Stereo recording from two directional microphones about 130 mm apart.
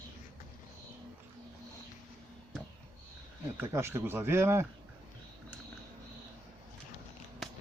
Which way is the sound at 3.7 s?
20° right (ahead or behind).